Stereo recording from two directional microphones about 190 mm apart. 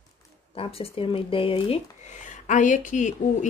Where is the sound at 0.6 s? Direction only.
30° left (ahead or behind).